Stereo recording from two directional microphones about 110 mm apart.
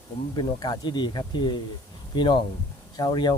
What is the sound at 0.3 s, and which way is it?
Speech, 40° left (ahead or behind).